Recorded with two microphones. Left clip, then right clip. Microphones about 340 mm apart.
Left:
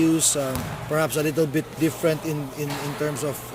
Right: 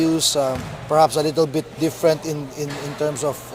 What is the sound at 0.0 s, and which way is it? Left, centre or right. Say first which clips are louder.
Basketball bounce: right 2 dB; centre.